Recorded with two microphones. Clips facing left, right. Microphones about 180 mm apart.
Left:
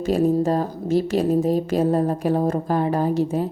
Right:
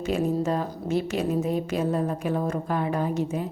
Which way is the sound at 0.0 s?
35° left (ahead or behind).